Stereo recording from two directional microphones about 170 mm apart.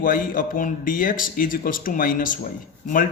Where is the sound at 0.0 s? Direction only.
55° left (ahead or behind).